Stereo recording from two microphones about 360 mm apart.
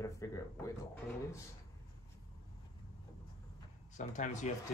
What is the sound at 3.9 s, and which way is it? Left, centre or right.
Speech, left.